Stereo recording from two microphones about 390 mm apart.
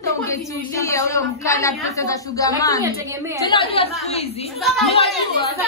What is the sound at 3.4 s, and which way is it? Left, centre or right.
A woman's voice, centre.